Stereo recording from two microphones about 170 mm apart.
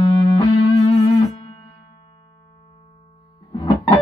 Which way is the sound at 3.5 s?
25° left (ahead or behind).